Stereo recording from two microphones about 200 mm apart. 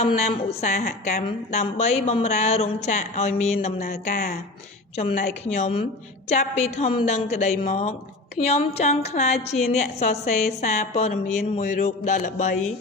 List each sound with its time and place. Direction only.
0.0 s a woman's voice: 35° left (ahead or behind)